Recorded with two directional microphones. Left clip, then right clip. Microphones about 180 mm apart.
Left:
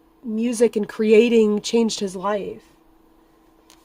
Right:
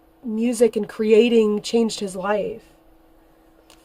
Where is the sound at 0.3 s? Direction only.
30° left (ahead or behind).